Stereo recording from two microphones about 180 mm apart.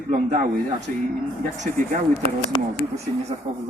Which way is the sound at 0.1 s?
40° right (ahead or behind).